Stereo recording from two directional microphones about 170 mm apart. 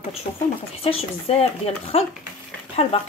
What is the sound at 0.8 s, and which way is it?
Speech, 35° left (ahead or behind).